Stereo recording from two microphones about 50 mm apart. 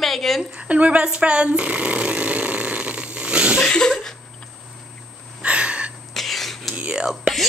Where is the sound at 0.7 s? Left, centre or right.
Right.